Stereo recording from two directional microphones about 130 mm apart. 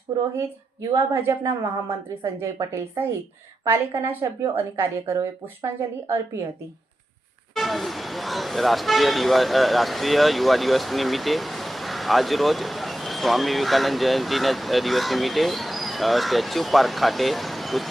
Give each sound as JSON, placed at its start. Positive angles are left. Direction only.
{"t": 0.3, "sound": "a woman's voice", "side_deg": -20}
{"t": 2.4, "sound": "a woman's voice", "side_deg": -20}
{"t": 7.5, "sound": "speech", "side_deg": 0}